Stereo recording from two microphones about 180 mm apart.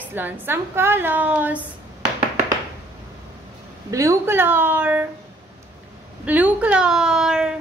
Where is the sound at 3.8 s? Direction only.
15° right (ahead or behind).